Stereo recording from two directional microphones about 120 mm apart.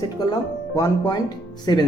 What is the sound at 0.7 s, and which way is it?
Speech, 25° left (ahead or behind).